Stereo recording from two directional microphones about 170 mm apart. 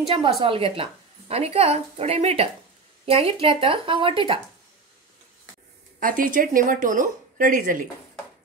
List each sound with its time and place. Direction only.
0.0 s speech: 30° right (ahead or behind)
5.9 s a woman's voice: 55° right (ahead or behind)